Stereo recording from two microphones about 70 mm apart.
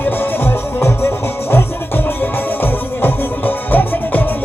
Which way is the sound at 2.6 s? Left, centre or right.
Left.